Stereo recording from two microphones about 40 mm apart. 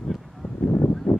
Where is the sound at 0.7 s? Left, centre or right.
Left.